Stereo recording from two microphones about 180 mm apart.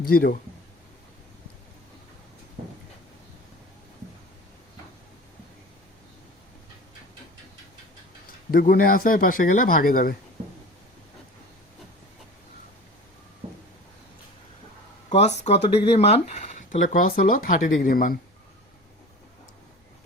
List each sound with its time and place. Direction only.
0.0 s speech: 55° left (ahead or behind)
8.4 s speech: 55° left (ahead or behind)
15.1 s speech: 40° left (ahead or behind)